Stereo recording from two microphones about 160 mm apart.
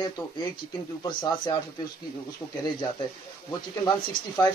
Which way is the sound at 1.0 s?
25° left (ahead or behind).